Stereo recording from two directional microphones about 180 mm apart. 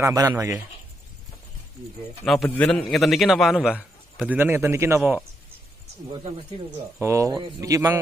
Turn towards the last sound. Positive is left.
turn(degrees=-15)  # may be behind; listen again after turning